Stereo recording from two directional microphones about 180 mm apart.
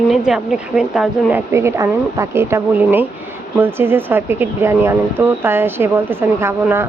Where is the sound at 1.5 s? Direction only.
15° right (ahead or behind).